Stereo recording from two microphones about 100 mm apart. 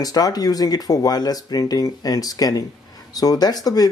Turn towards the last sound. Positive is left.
turn(degrees=40)  # may be behind; listen again after turning